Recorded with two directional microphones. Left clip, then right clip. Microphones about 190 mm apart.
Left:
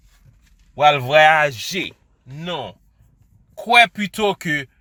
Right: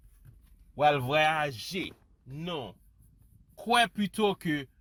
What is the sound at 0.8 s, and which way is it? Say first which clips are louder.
Speech: left 12 dB; 20° left (ahead or behind).